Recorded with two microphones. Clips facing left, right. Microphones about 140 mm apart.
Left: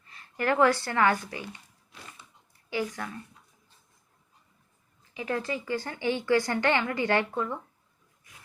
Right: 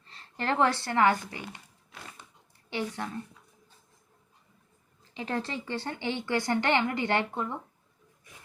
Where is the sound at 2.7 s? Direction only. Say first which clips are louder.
Left 1 dB; 25° right (ahead or behind).